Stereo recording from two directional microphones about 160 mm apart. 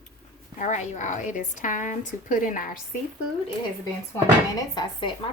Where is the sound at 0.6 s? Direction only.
50° left (ahead or behind).